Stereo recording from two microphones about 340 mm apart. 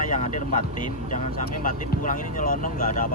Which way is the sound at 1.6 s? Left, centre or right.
Left.